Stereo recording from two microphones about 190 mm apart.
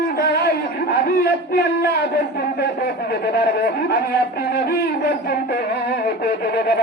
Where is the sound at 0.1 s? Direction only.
55° left (ahead or behind).